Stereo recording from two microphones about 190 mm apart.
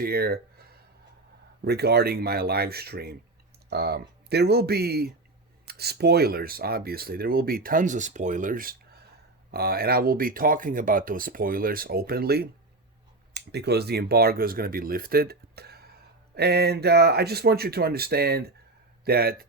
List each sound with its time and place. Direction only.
0.0 s speech: 55° right (ahead or behind)